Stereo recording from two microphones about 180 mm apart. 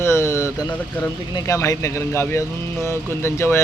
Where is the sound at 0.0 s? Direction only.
15° left (ahead or behind).